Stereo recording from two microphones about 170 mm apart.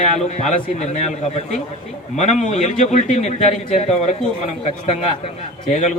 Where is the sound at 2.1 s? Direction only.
45° left (ahead or behind).